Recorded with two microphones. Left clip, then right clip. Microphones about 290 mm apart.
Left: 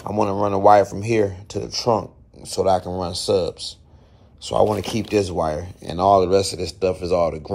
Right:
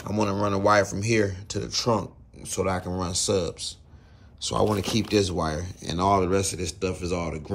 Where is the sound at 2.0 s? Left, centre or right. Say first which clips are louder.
Left 4 dB; centre.